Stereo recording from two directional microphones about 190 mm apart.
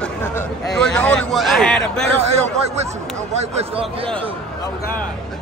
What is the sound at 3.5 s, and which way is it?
Speech, 30° right (ahead or behind).